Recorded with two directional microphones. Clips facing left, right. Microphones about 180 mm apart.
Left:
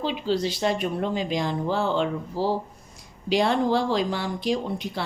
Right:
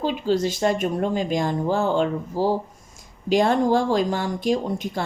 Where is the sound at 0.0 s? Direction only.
45° right (ahead or behind).